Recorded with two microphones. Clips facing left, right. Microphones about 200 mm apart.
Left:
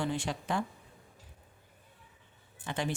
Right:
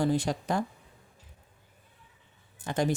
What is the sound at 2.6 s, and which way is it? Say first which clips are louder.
Speech: right 6 dB; 40° right (ahead or behind).